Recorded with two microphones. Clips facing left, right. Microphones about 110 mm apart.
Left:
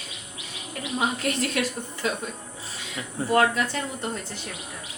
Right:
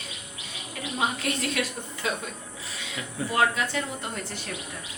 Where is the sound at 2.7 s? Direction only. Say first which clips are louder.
Left 1 dB; 40° left (ahead or behind).